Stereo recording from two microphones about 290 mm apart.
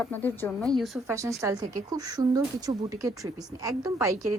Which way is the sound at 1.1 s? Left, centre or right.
Centre.